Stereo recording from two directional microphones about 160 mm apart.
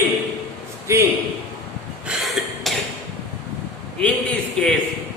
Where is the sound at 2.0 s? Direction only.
Centre (ahead or behind).